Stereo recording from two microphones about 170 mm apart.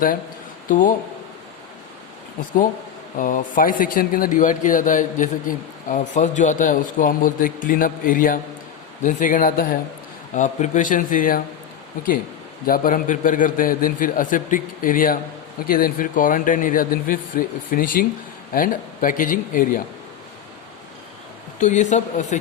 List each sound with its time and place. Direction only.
0.7 s speech: 50° left (ahead or behind)
3.2 s speech: 50° left (ahead or behind)
12.6 s speech: 55° left (ahead or behind)
21.6 s speech: 45° left (ahead or behind)